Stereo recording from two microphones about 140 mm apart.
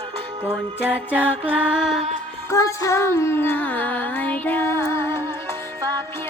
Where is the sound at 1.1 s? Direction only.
10° right (ahead or behind).